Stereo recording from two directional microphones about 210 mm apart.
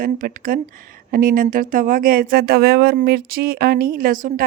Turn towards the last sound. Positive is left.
turn(degrees=-40)  # may be behind; listen again after turning